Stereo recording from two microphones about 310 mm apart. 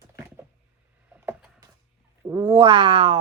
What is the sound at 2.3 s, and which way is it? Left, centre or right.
Speech, centre.